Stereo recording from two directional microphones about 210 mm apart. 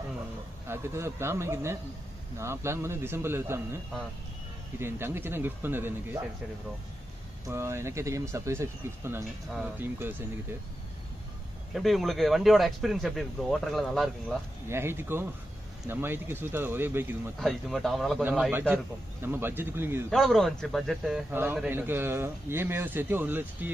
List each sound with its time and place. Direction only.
0.7 s a man's voice: 10° right (ahead or behind)
4.7 s a man's voice: 10° right (ahead or behind)
7.4 s a man's voice: 10° right (ahead or behind)
11.7 s a man's voice: centre (ahead or behind)
14.7 s a man's voice: 10° right (ahead or behind)
17.4 s a man's voice: centre (ahead or behind)
20.1 s a man's voice: centre (ahead or behind)